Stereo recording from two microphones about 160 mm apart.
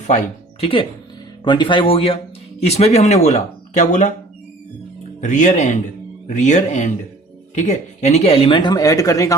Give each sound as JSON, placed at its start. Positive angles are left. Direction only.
{"t": 0.6, "sound": "speech", "side_deg": 35}
{"t": 5.2, "sound": "speech", "side_deg": 50}